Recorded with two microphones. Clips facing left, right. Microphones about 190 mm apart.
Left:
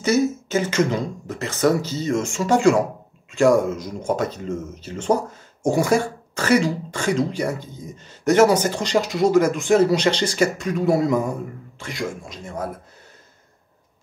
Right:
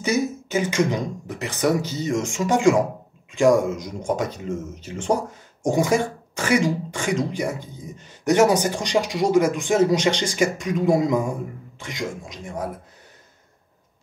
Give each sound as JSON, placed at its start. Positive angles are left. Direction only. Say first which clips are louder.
{"t": 0.0, "sound": "speech", "louder": "left 4 dB", "side_deg": -15}